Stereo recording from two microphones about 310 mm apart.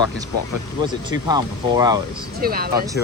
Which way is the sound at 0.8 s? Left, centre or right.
Centre.